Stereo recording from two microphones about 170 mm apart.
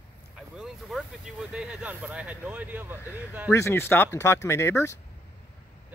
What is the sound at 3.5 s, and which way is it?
Speech, 15° left (ahead or behind).